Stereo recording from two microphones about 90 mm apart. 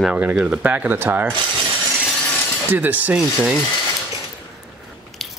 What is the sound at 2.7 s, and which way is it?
Speech, 20° right (ahead or behind).